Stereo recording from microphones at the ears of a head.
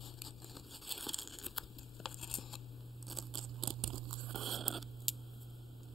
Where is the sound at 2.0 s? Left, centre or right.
Left.